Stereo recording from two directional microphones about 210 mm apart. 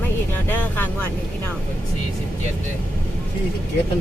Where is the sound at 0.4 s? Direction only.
10° left (ahead or behind).